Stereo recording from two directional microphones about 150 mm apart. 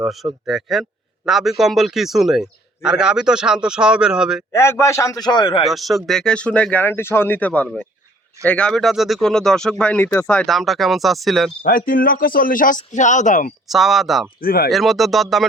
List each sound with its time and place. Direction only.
0.0 s a man's voice: centre (ahead or behind)
4.5 s a man's voice: 15° left (ahead or behind); by 5.6 s 35° left (ahead or behind)
5.6 s a man's voice: centre (ahead or behind)
11.9 s speech: 70° left (ahead or behind)
13.7 s a man's voice: centre (ahead or behind)
14.4 s speech: 80° left
14.7 s a man's voice: centre (ahead or behind)